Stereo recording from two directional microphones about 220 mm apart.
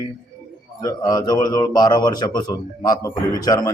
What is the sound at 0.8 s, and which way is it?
A man's voice, 15° left (ahead or behind).